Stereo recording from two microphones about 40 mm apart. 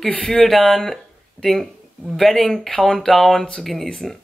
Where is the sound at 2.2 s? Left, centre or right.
Centre.